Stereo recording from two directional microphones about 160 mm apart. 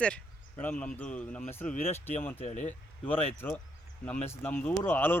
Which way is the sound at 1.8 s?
40° left (ahead or behind).